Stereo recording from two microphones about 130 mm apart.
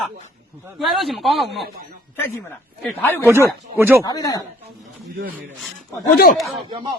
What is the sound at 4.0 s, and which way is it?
Speech, 30° left (ahead or behind).